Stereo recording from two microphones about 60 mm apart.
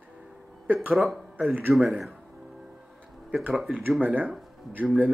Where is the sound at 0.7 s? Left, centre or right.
Right.